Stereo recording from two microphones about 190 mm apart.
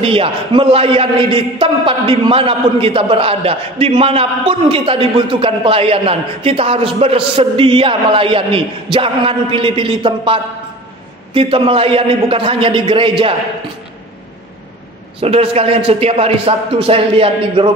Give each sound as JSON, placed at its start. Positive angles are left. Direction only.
{"t": 0.0, "sound": "a man's voice", "side_deg": -30}
{"t": 15.1, "sound": "speech", "side_deg": -30}